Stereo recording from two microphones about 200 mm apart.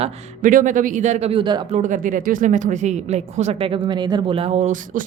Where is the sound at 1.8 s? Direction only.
40° right (ahead or behind).